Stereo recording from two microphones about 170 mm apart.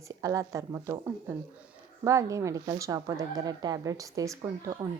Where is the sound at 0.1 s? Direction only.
20° right (ahead or behind).